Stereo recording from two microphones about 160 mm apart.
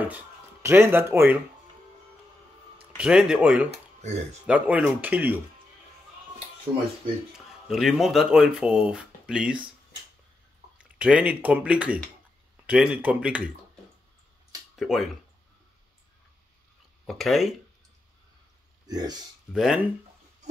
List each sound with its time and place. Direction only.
0.1 s speech: 15° right (ahead or behind)
3.0 s speech: 5° right (ahead or behind)
3.7 s speech: 45° right (ahead or behind)
4.5 s speech: 10° right (ahead or behind)
7.3 s speech: centre (ahead or behind)
10.8 s speech: 5° right (ahead or behind)
14.8 s speech: centre (ahead or behind)
17.0 s speech: centre (ahead or behind)
18.9 s speech: 25° right (ahead or behind)
19.5 s speech: 5° right (ahead or behind)